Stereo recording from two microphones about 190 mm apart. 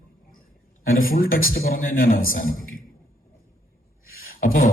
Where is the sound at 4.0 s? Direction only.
50° left (ahead or behind).